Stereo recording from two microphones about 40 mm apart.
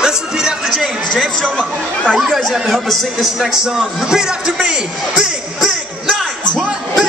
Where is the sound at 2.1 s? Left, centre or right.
Centre.